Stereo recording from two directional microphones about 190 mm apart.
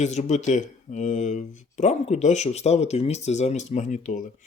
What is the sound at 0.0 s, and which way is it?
Speech, 35° left (ahead or behind).